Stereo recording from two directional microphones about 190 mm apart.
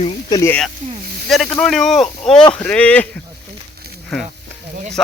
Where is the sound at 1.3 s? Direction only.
Centre (ahead or behind).